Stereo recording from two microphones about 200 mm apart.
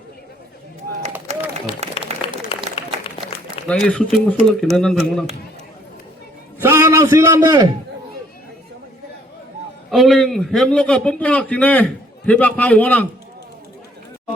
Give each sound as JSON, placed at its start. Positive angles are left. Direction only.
{"t": 1.3, "sound": "run", "side_deg": -35}
{"t": 2.0, "sound": "a sound", "side_deg": 25}
{"t": 2.7, "sound": "applause", "side_deg": 30}
{"t": 3.7, "sound": "a man's voice", "side_deg": 5}
{"t": 6.6, "sound": "a sound", "side_deg": -15}
{"t": 9.9, "sound": "a man's voice", "side_deg": 0}